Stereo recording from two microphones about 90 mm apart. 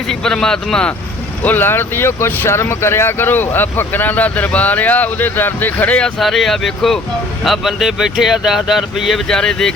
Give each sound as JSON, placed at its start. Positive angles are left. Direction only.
{"t": 0.1, "sound": "speech", "side_deg": 5}
{"t": 1.4, "sound": "speech", "side_deg": 20}
{"t": 6.1, "sound": "speech", "side_deg": 0}